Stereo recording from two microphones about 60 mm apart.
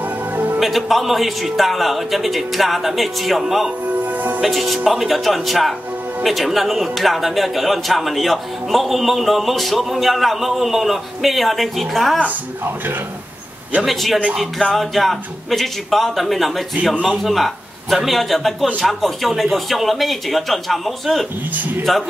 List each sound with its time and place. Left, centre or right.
0.6 s a man's voice: centre
4.0 s music: right
4.4 s a man's voice: centre
13.8 s a man's voice: centre